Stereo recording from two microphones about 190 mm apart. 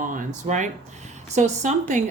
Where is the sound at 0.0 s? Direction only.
45° right (ahead or behind).